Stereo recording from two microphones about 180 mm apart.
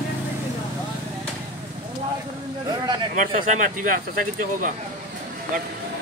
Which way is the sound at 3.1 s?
50° right (ahead or behind).